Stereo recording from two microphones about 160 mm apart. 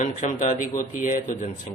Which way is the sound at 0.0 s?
45° left (ahead or behind).